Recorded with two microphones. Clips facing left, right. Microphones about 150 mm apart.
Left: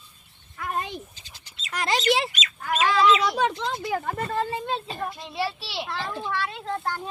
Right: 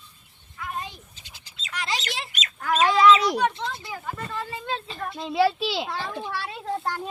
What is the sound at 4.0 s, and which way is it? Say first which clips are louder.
Speech: left 5 dB; 50° left (ahead or behind).